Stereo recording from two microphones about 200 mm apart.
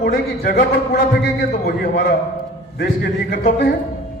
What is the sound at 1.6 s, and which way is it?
A man's voice, 50° left (ahead or behind).